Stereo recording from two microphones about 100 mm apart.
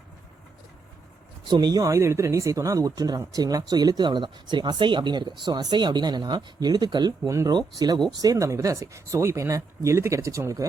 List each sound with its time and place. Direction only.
1.5 s speech: 45° right (ahead or behind)
7.3 s speech: 30° right (ahead or behind)